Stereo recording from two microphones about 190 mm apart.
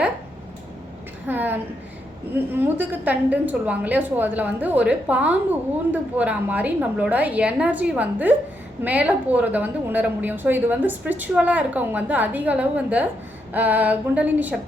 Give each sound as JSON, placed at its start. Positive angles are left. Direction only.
{"t": 1.3, "sound": "a woman's voice", "side_deg": -10}